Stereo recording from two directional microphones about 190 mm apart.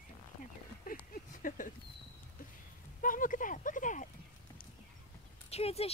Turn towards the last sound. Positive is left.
turn(degrees=30)  # may be behind; listen again after turning